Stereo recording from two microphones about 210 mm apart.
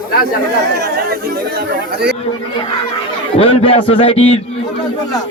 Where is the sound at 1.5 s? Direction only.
50° right (ahead or behind).